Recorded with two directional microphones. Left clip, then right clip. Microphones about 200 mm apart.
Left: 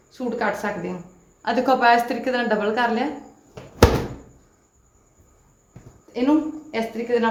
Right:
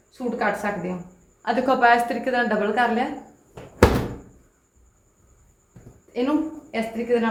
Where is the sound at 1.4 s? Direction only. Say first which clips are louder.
Left 1 dB; 25° left (ahead or behind).